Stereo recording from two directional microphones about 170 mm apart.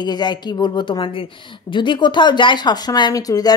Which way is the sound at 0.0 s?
25° left (ahead or behind).